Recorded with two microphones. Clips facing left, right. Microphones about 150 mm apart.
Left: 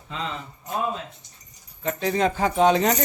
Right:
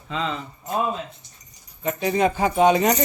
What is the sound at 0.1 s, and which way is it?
Speech, 90° right.